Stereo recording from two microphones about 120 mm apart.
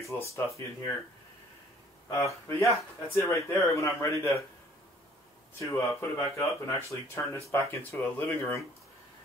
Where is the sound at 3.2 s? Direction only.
25° left (ahead or behind).